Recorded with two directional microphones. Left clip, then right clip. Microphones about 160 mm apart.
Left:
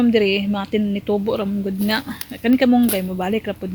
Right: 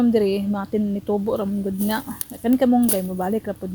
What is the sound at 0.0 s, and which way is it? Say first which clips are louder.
A woman's voice: left 3 dB; 10° right (ahead or behind).